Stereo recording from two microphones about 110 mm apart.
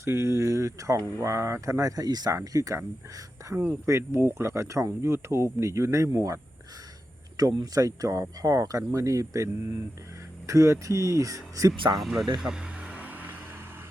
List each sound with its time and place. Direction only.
0.0 s speech: 25° right (ahead or behind)
3.5 s speech: 15° right (ahead or behind)
7.6 s speech: 35° right (ahead or behind)
11.9 s speech: centre (ahead or behind)
12.4 s vehicle: 5° right (ahead or behind)